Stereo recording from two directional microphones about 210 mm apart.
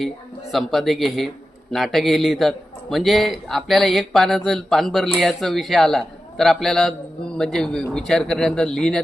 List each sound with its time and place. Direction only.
0.5 s a man's voice: centre (ahead or behind)